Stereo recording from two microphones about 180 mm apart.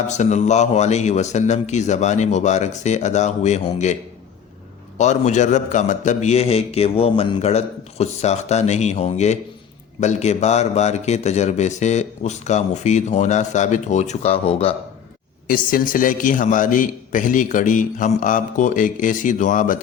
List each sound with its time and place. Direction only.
0.1 s a man's voice: 40° left (ahead or behind)
4.9 s a man's voice: 40° left (ahead or behind)
15.4 s a man's voice: 50° left (ahead or behind)